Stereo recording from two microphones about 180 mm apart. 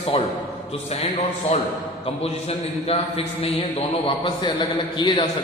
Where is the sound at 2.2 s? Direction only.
35° left (ahead or behind).